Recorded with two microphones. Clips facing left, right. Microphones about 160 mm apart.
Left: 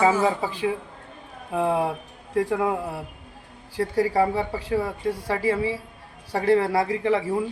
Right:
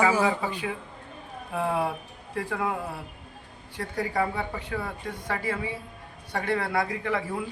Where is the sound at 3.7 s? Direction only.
35° left (ahead or behind).